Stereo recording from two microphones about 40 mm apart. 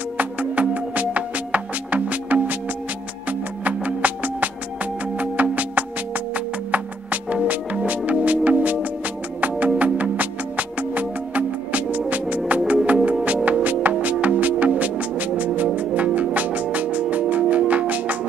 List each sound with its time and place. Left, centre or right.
0.2 s music: right